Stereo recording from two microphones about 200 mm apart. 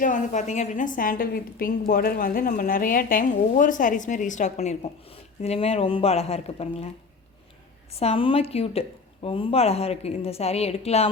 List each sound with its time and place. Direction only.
0.0 s a woman's voice: 40° left (ahead or behind)